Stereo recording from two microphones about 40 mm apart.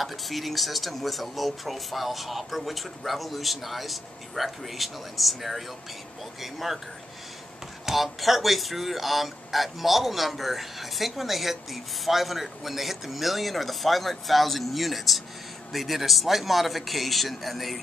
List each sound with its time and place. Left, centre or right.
0.0 s speech: centre
7.8 s speech: centre